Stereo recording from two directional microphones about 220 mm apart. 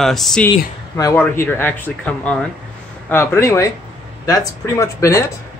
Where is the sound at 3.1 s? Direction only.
10° left (ahead or behind).